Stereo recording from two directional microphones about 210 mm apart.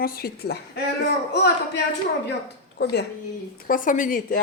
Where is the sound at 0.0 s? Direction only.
45° left (ahead or behind).